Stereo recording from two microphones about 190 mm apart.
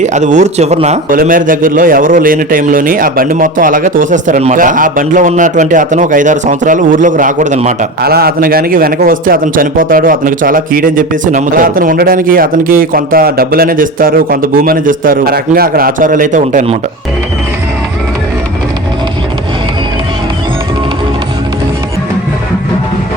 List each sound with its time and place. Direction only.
0.0 s speech: 40° right (ahead or behind)
1.2 s a man's voice: 45° right (ahead or behind)
8.0 s a man's voice: 55° right (ahead or behind)